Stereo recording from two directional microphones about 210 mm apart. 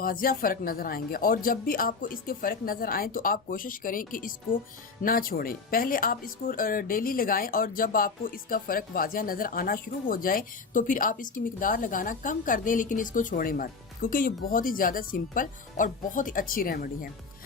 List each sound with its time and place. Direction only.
0.0 s speech: 45° left (ahead or behind)